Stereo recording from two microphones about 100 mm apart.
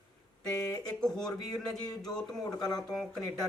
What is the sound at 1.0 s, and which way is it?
Speech, 5° left (ahead or behind).